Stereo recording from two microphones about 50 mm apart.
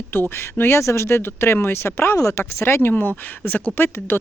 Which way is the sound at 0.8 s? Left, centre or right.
Left.